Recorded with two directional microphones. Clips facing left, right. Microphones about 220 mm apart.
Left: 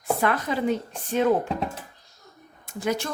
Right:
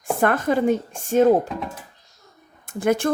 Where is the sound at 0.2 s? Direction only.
50° right (ahead or behind).